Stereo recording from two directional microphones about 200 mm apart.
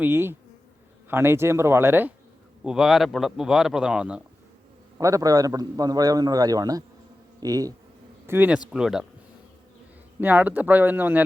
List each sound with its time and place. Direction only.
0.0 s a man's voice: 10° right (ahead or behind)
4.9 s a man's voice: 15° right (ahead or behind)
8.3 s a man's voice: 10° right (ahead or behind)
10.2 s a man's voice: 10° right (ahead or behind)